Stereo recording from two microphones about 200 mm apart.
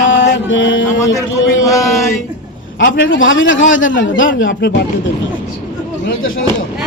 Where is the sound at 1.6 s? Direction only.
15° left (ahead or behind).